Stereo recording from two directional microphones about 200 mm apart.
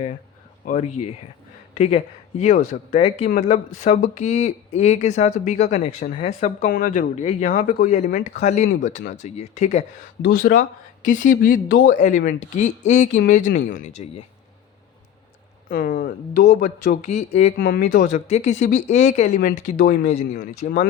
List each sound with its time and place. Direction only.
0.6 s speech: 40° left (ahead or behind)
10.2 s speech: 45° left (ahead or behind)
15.7 s speech: 45° left (ahead or behind)
17.6 s speech: 50° left (ahead or behind)